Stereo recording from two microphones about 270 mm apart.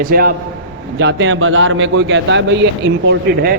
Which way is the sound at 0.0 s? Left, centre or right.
Right.